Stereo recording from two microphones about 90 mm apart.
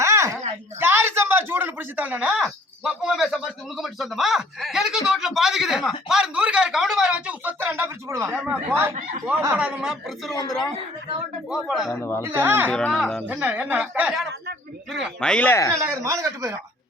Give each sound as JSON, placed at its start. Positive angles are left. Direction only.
{"t": 0.0, "sound": "a sound", "side_deg": -30}
{"t": 0.8, "sound": "speech", "side_deg": -25}
{"t": 9.6, "sound": "speech", "side_deg": -10}
{"t": 10.3, "sound": "speech", "side_deg": 45}
{"t": 11.5, "sound": "speech", "side_deg": 0}
{"t": 12.2, "sound": "speech", "side_deg": -25}
{"t": 12.7, "sound": "speech", "side_deg": 10}
{"t": 13.2, "sound": "speech", "side_deg": -15}
{"t": 15.2, "sound": "speech", "side_deg": 10}
{"t": 15.4, "sound": "speech", "side_deg": 30}
{"t": 15.8, "sound": "speech", "side_deg": -35}